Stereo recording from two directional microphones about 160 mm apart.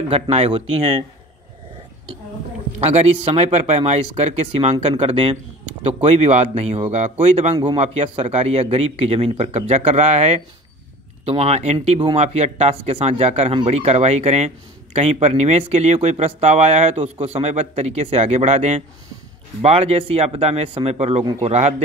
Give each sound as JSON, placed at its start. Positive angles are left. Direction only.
{"t": 0.1, "sound": "a man's voice", "side_deg": -40}
{"t": 2.8, "sound": "a man's voice", "side_deg": -40}
{"t": 21.2, "sound": "a man's voice", "side_deg": -30}
{"t": 21.5, "sound": "speech", "side_deg": -45}